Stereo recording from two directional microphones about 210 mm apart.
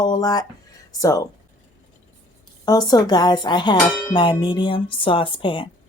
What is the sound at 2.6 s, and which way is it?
Speech, 20° left (ahead or behind).